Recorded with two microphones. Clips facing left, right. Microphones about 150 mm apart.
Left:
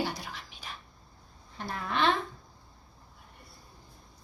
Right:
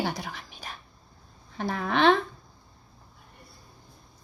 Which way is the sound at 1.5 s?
65° right (ahead or behind).